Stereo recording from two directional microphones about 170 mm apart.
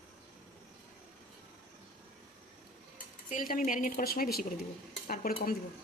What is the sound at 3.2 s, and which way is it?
Speech, 55° left (ahead or behind).